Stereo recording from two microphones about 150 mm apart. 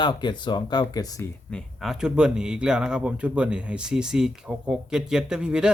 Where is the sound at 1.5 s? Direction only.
Centre (ahead or behind).